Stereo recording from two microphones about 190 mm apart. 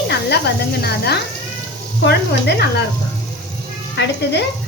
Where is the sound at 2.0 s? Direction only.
60° left (ahead or behind).